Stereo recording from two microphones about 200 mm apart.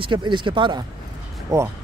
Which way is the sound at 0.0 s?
25° right (ahead or behind).